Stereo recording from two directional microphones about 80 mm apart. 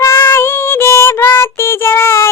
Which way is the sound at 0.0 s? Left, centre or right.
Left.